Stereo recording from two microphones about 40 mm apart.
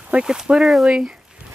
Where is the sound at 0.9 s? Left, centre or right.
Centre.